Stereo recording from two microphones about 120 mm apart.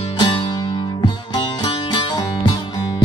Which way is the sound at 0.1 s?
40° left (ahead or behind).